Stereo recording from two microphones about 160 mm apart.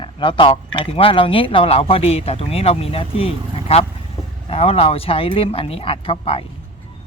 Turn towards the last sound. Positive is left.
turn(degrees=35)  # may be behind; listen again after turning